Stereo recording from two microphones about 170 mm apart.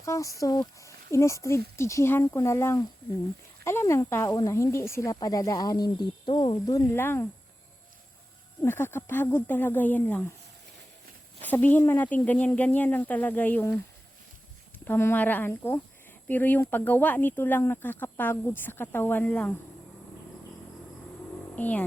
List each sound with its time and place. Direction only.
0.0 s speech: 20° left (ahead or behind)
8.6 s speech: 15° left (ahead or behind)
11.4 s speech: 10° left (ahead or behind)
14.8 s speech: 10° left (ahead or behind)
21.5 s speech: 10° left (ahead or behind)